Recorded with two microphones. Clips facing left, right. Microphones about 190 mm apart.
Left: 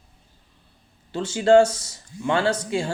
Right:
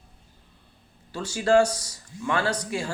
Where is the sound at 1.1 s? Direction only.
25° left (ahead or behind).